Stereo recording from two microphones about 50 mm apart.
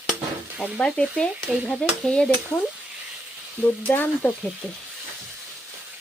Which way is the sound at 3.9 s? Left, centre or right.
Left.